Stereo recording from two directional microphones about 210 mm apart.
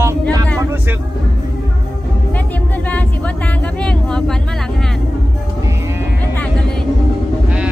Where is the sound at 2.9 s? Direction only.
5° left (ahead or behind).